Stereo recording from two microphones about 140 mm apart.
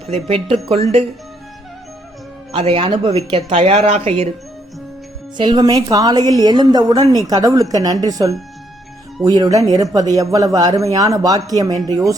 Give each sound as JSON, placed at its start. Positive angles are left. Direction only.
{"t": 0.1, "sound": "a woman's voice", "side_deg": -40}
{"t": 2.5, "sound": "a man's voice", "side_deg": -40}
{"t": 5.4, "sound": "a woman's voice", "side_deg": -30}